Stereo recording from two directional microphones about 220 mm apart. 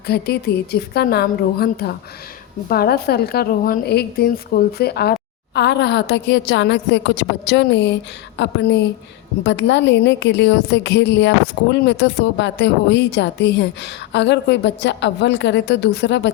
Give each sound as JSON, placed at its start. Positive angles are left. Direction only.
{"t": 0.1, "sound": "a woman's voice", "side_deg": 45}